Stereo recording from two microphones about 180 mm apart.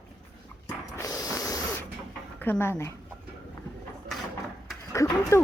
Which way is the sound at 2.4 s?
10° left (ahead or behind).